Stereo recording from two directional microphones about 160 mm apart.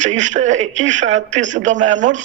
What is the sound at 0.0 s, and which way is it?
Speech, 50° right (ahead or behind).